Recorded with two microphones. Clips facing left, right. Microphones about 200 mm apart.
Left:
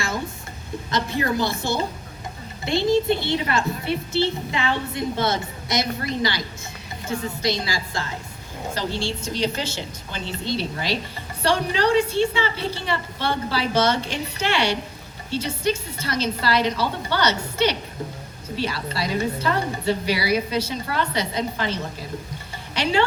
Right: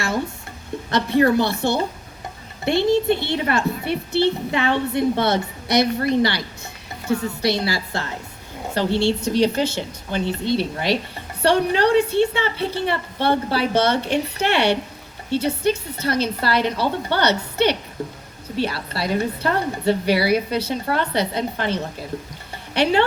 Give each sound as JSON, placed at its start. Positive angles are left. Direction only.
{"t": 0.9, "sound": "a woman's voice", "side_deg": -65}